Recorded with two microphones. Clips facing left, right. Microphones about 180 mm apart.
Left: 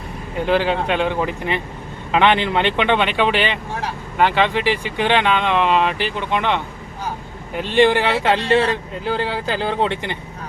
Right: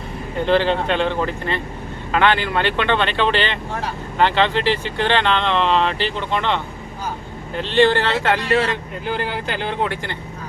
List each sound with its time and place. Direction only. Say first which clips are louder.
0.4 s speech: right 1 dB; 10° left (ahead or behind)